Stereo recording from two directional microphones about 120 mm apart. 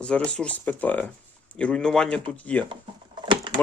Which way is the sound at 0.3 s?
10° left (ahead or behind).